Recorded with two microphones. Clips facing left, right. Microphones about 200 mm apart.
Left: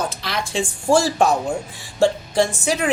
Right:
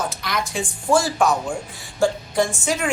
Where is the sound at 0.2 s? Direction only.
30° left (ahead or behind).